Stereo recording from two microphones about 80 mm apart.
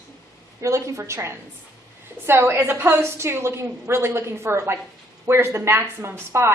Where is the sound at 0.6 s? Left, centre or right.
Right.